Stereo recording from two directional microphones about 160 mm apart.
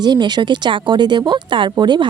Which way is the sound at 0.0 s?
25° right (ahead or behind).